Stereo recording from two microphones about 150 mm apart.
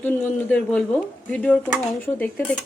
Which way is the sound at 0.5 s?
10° left (ahead or behind).